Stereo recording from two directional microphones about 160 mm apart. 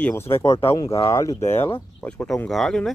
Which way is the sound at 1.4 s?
15° left (ahead or behind).